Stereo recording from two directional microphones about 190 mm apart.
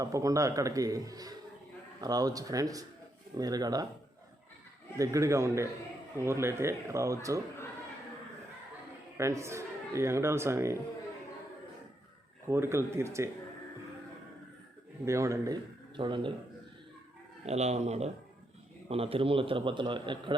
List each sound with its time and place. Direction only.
0.0 s a man's voice: 15° right (ahead or behind)
4.9 s speech: 15° right (ahead or behind)
9.1 s speech: 15° right (ahead or behind)
12.5 s speech: 15° right (ahead or behind)
15.0 s a man's voice: 15° right (ahead or behind)
17.4 s a man's voice: 35° right (ahead or behind)